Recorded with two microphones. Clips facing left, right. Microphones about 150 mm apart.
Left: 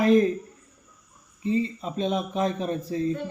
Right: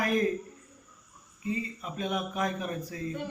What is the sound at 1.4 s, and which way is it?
A man's voice, 25° left (ahead or behind).